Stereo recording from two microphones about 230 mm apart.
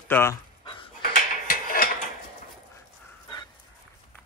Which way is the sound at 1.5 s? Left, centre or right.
Left.